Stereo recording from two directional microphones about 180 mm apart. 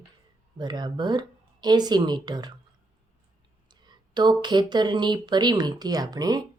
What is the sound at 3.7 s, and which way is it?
Speech, 25° right (ahead or behind).